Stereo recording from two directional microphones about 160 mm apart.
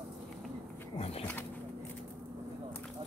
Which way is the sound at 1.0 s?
40° left (ahead or behind).